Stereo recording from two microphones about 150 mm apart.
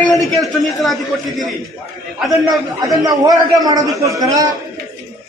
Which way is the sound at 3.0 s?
25° right (ahead or behind).